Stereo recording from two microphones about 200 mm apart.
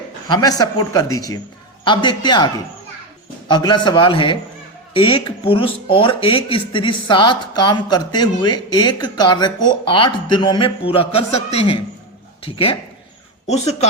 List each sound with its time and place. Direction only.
0.3 s a man's voice: 20° left (ahead or behind)
3.5 s speech: 20° left (ahead or behind)
13.5 s speech: 30° left (ahead or behind)